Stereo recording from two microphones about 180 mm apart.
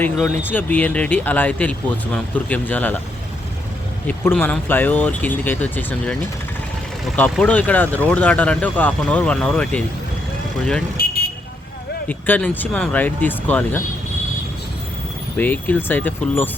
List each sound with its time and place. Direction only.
0.0 s speech: 10° left (ahead or behind)
4.0 s speech: 10° left (ahead or behind)
7.2 s speech: 10° left (ahead or behind)
12.0 s speech: 10° left (ahead or behind)
15.4 s speech: 10° left (ahead or behind)